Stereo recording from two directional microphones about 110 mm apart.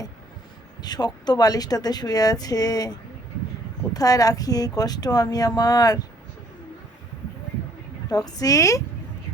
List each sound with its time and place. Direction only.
0.8 s speech: 40° left (ahead or behind)
3.9 s speech: 35° left (ahead or behind)
8.1 s speech: 35° left (ahead or behind)